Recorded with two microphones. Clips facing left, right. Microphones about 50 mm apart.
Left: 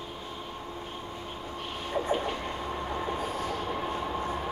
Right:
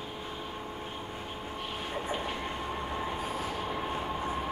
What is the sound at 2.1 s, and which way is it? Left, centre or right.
Train, centre.